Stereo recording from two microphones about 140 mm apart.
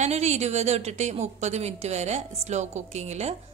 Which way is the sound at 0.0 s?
55° right (ahead or behind).